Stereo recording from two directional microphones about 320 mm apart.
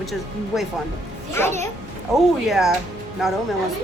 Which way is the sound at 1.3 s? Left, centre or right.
Centre.